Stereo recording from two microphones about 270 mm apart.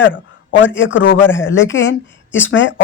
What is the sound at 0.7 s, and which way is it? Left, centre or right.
Speech, left.